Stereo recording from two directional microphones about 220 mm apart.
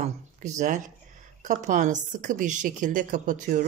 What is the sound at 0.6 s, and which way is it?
A woman's voice, 35° right (ahead or behind).